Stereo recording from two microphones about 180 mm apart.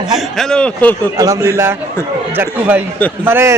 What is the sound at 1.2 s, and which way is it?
Speech, 20° right (ahead or behind).